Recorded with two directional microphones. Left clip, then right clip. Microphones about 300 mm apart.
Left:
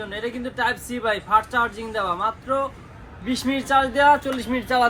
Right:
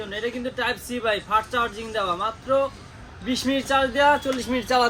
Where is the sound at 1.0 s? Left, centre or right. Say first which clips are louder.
Left 3 dB; left.